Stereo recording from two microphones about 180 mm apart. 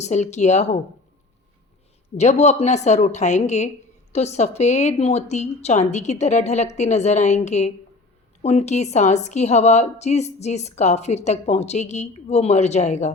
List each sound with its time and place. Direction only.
0.0 s a woman's voice: 40° left (ahead or behind)
2.1 s a woman's voice: 40° left (ahead or behind)